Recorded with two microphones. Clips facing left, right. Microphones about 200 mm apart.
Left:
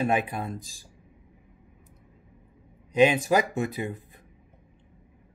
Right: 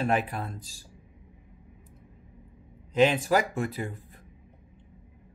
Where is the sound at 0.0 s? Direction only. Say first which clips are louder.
Left 1 dB; 15° left (ahead or behind).